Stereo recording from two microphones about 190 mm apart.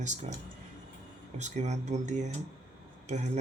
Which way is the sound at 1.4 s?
35° right (ahead or behind).